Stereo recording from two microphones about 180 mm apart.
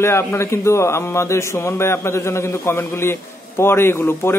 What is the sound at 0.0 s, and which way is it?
A man's voice, 15° left (ahead or behind).